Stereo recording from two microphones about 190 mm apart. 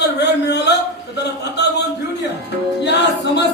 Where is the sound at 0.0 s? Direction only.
60° left (ahead or behind).